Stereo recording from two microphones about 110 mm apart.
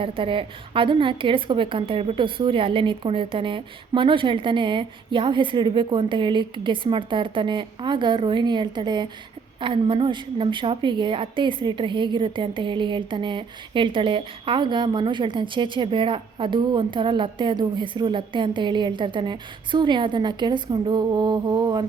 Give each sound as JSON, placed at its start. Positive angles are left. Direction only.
{"t": 0.0, "sound": "a woman's voice", "side_deg": -50}